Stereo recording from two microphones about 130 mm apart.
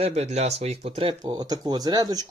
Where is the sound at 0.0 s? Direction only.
55° right (ahead or behind).